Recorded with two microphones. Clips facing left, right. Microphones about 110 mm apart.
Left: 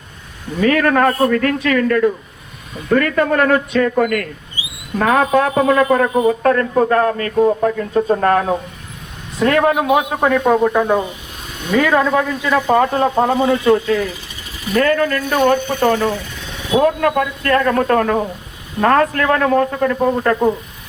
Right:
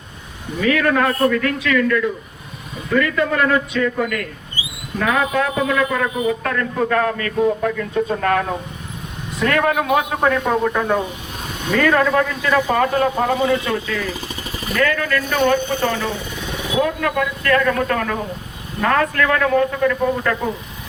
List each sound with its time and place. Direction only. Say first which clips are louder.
0.6 s a man's voice: left 4 dB; 45° left (ahead or behind); by 9.8 s 30° left (ahead or behind)
9.8 s a man's voice: left 2 dB; 20° left (ahead or behind)
12.6 s a man's voice: left 3 dB; 25° left (ahead or behind)